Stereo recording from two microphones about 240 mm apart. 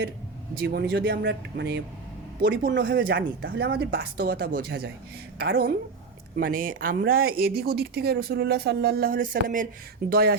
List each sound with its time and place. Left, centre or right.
0.6 s speech: right